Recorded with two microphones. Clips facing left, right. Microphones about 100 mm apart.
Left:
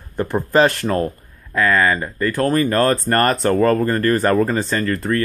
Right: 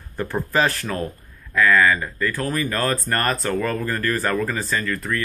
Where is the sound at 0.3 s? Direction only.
25° left (ahead or behind).